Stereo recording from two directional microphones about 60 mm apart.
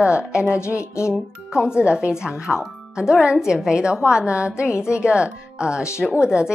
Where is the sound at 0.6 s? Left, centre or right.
Left.